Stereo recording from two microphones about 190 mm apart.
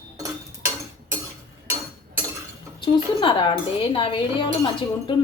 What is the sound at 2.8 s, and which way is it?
Speech, 25° left (ahead or behind).